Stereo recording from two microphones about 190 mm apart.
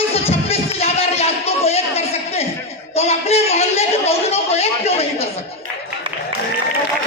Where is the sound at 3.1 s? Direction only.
35° left (ahead or behind).